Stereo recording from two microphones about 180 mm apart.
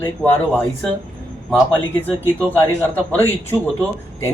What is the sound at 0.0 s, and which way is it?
Speech, 10° left (ahead or behind).